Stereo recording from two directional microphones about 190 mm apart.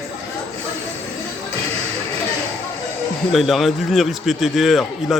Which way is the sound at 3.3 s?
Centre (ahead or behind).